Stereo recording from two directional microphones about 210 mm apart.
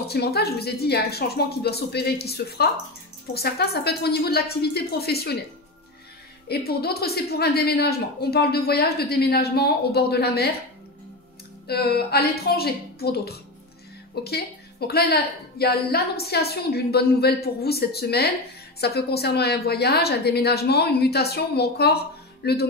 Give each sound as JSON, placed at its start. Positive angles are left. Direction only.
{"t": 0.1, "sound": "a woman's voice", "side_deg": 50}
{"t": 6.5, "sound": "a woman's voice", "side_deg": 50}
{"t": 11.6, "sound": "a woman's voice", "side_deg": 50}